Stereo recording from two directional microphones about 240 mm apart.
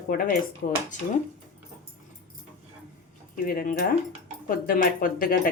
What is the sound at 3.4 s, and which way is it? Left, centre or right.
Speech, left.